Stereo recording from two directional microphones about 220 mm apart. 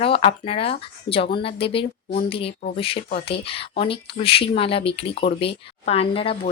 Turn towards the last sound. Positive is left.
turn(degrees=25)  # may be behind; listen again after turning